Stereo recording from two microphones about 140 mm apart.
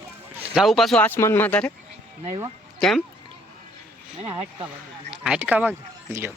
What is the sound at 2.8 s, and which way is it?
Speech, centre (ahead or behind).